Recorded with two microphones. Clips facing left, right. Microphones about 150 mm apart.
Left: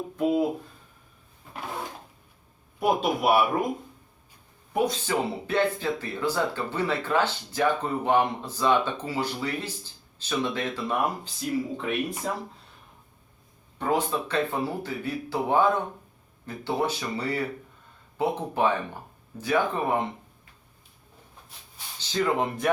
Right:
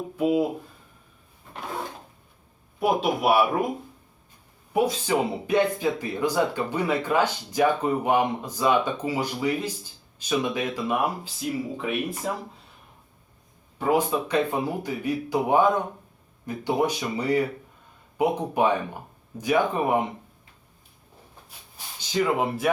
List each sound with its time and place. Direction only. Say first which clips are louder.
2.8 s speech: right 1 dB; centre (ahead or behind)
4.7 s speech: right 3 dB; 10° right (ahead or behind)
13.7 s speech: right 3 dB; 10° right (ahead or behind)
21.9 s speech: right 2 dB; 10° right (ahead or behind)